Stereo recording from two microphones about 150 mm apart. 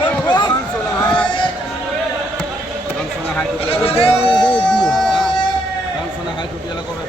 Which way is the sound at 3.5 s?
40° left (ahead or behind).